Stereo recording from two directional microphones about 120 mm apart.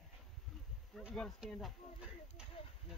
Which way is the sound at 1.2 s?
5° left (ahead or behind).